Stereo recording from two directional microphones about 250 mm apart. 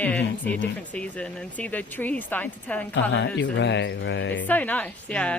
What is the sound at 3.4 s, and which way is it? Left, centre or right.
Speech, left.